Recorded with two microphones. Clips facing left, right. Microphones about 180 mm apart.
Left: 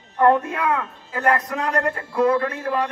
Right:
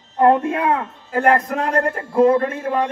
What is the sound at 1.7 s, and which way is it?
Speech, 40° right (ahead or behind).